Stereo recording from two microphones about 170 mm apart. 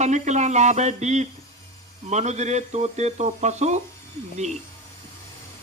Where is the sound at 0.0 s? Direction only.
40° right (ahead or behind).